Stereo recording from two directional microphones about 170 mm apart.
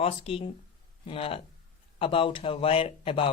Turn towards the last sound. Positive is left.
turn(degrees=30)  # may be behind; listen again after turning